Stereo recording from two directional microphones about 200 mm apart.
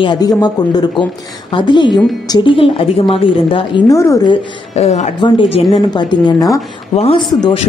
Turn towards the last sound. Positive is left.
turn(degrees=25)  # may be behind; listen again after turning